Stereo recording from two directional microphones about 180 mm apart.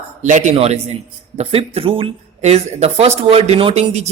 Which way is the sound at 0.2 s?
45° right (ahead or behind).